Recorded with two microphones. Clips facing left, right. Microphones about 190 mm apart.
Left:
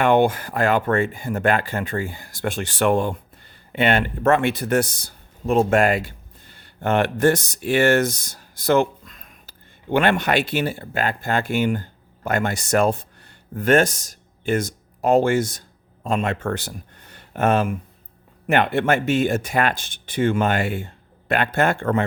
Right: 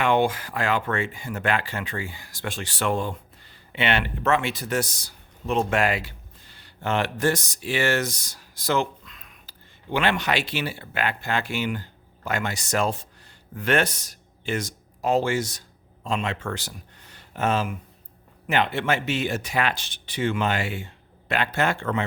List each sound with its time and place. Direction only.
0.0 s speech: 50° left (ahead or behind)
3.7 s speech: 45° left (ahead or behind)